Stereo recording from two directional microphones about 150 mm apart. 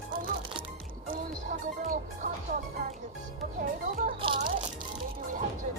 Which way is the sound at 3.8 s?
65° right (ahead or behind).